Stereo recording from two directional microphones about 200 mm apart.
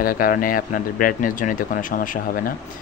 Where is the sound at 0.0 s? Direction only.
45° left (ahead or behind).